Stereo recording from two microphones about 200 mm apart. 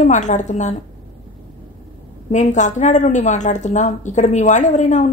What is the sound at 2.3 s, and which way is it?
A woman's voice, 35° left (ahead or behind).